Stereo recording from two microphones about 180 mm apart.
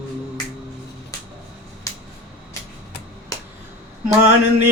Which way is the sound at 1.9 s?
20° left (ahead or behind).